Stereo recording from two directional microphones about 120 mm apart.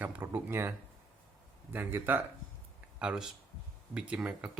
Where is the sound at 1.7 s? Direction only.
15° right (ahead or behind).